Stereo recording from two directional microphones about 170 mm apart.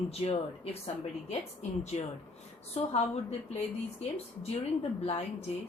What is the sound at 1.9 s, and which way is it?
Speech, 40° left (ahead or behind).